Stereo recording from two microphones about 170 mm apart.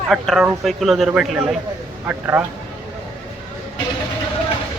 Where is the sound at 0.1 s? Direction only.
Centre (ahead or behind).